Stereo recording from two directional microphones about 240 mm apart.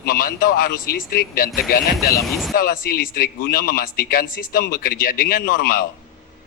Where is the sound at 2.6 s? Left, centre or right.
Left.